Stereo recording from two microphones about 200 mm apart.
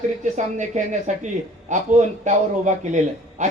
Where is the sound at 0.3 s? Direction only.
35° right (ahead or behind).